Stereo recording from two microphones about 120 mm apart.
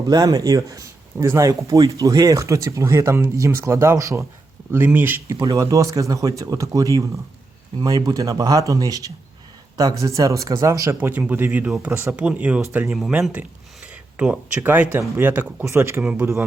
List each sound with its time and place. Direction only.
0.1 s speech: 30° right (ahead or behind)
5.4 s speech: 30° right (ahead or behind)
12.1 s speech: 10° right (ahead or behind)
13.8 s a sound: 10° right (ahead or behind)
14.6 s speech: 15° right (ahead or behind)